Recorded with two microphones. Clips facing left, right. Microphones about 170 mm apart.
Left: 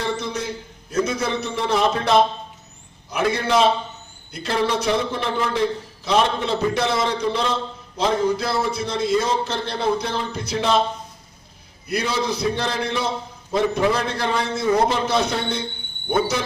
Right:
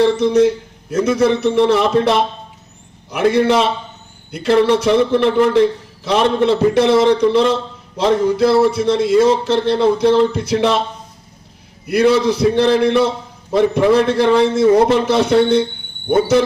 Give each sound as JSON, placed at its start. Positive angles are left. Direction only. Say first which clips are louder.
{"t": 0.0, "sound": "a man's voice", "louder": "right 14 dB", "side_deg": -70}
{"t": 1.0, "sound": "music", "louder": "right 10 dB", "side_deg": -70}
{"t": 4.3, "sound": "a man's voice", "louder": "right 9 dB", "side_deg": -70}
{"t": 7.9, "sound": "music", "louder": "right 6 dB", "side_deg": -70}
{"t": 11.9, "sound": "a man's voice", "louder": "right 11 dB", "side_deg": -65}
{"t": 14.8, "sound": "music", "louder": "right 7 dB", "side_deg": -65}